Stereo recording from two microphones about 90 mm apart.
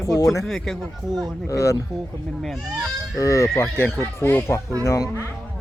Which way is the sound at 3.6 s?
25° left (ahead or behind).